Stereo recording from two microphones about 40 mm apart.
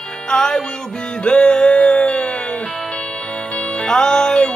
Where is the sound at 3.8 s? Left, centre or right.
Left.